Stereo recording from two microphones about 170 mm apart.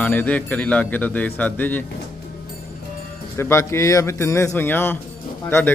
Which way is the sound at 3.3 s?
15° left (ahead or behind).